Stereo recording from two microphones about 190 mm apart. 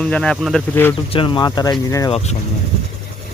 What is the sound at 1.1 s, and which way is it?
Speech, 25° left (ahead or behind).